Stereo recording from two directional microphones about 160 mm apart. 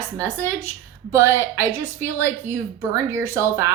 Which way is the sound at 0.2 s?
15° right (ahead or behind).